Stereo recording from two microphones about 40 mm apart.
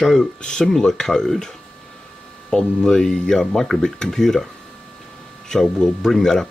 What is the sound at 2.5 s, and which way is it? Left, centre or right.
Speech, centre.